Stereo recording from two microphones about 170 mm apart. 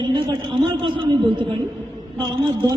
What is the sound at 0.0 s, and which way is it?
A man's voice, 30° right (ahead or behind).